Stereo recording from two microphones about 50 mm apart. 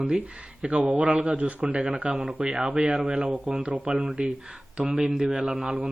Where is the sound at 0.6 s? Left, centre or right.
Right.